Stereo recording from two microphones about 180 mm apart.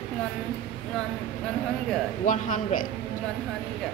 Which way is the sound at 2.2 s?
45° left (ahead or behind).